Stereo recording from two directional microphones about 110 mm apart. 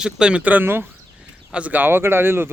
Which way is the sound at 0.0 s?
10° right (ahead or behind).